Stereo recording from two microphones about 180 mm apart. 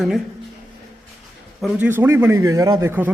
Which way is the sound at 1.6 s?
10° right (ahead or behind).